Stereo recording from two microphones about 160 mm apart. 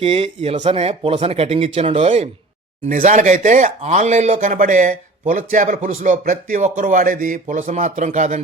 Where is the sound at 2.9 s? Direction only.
55° right (ahead or behind).